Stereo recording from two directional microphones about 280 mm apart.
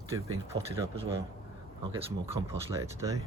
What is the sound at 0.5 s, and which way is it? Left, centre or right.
Speech, right.